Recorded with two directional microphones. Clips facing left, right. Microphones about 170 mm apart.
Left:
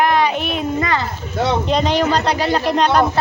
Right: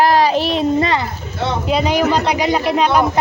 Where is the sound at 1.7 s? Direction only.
10° right (ahead or behind).